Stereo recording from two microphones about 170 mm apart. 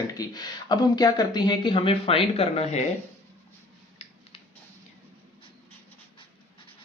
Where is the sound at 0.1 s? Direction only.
20° left (ahead or behind); by 2.8 s 40° left (ahead or behind).